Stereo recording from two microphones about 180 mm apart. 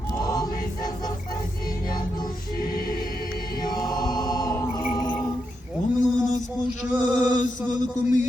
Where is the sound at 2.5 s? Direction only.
55° left (ahead or behind).